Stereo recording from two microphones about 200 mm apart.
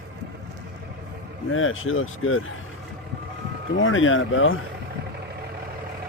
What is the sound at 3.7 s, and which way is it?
Speech, 75° left (ahead or behind).